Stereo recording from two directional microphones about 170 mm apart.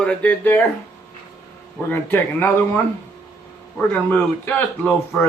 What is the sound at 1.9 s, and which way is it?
A man's voice, 10° left (ahead or behind).